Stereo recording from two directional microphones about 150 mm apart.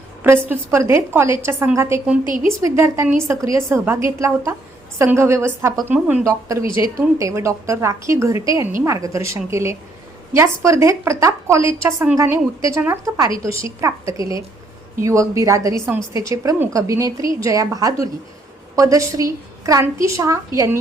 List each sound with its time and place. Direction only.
0.2 s a woman's voice: 15° right (ahead or behind)